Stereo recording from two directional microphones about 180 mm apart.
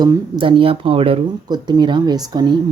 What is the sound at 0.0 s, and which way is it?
Speech, 25° right (ahead or behind).